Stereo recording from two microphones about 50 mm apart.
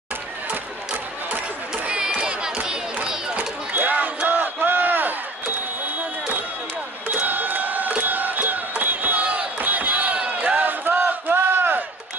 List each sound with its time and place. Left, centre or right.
1.9 s crowd: centre
3.7 s crowd: right
5.9 s a sound: right
7.1 s crowd: right